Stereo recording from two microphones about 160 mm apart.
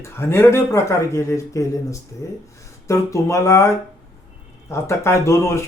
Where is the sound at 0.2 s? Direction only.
15° left (ahead or behind).